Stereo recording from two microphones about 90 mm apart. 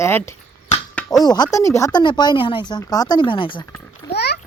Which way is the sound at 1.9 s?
55° left (ahead or behind).